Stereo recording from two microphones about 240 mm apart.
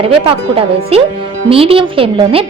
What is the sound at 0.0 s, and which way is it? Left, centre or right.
Speech, right.